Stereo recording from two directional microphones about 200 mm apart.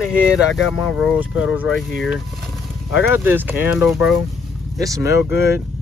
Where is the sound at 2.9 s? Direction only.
10° right (ahead or behind).